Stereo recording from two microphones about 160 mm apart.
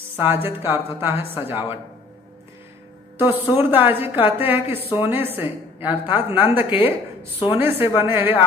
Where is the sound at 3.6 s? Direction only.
10° right (ahead or behind).